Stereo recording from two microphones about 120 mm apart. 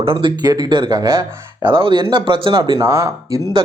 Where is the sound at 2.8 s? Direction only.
25° right (ahead or behind).